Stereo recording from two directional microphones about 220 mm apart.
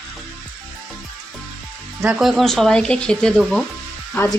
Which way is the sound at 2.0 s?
5° right (ahead or behind).